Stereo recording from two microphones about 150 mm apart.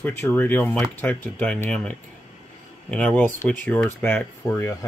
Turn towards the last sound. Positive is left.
turn(degrees=20)  # may be behind; listen again after turning